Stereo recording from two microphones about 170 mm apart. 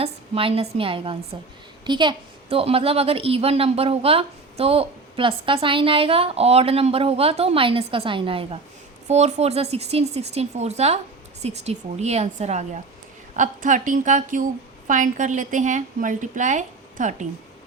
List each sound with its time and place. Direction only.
0.0 s a woman's voice: 35° right (ahead or behind)